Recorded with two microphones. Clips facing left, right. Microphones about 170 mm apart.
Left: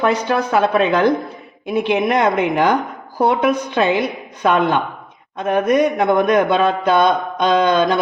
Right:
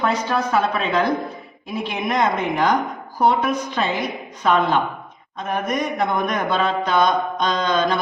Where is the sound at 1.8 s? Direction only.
65° left (ahead or behind).